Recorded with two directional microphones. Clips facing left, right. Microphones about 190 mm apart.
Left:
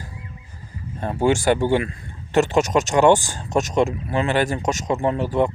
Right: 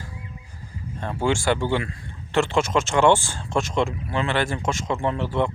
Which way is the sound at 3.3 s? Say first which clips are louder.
Left 3 dB; 40° left (ahead or behind).